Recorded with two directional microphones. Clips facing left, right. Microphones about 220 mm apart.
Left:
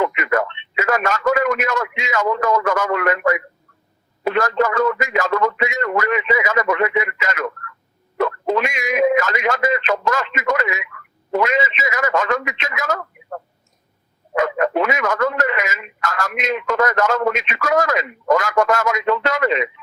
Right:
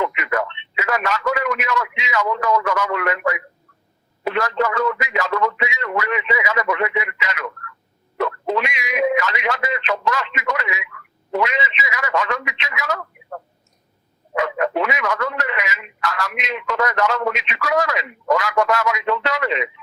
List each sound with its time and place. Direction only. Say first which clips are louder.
0.0 s radio: left 3 dB; 45° left (ahead or behind)
4.2 s speech: left 3 dB; 45° left (ahead or behind)